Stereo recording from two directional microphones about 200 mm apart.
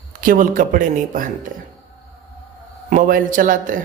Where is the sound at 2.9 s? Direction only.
45° right (ahead or behind).